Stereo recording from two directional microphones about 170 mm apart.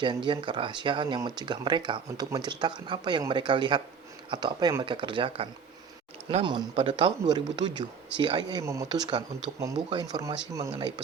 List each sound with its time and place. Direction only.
0.0 s speech: 25° right (ahead or behind)